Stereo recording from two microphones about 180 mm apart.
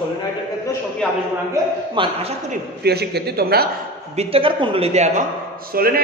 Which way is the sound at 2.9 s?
65° right (ahead or behind).